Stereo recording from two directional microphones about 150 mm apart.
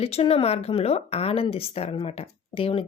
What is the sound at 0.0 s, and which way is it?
Speech, 40° left (ahead or behind).